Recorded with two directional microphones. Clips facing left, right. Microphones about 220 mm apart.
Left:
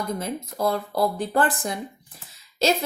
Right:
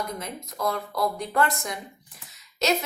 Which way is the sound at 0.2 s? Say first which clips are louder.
Left 5 dB; 30° left (ahead or behind).